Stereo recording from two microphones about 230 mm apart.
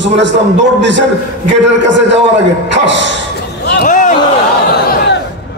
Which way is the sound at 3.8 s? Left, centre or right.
Left.